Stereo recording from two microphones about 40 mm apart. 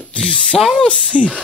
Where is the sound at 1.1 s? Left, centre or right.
Right.